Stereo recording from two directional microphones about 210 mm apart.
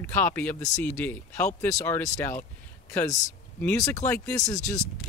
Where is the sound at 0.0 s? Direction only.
10° left (ahead or behind).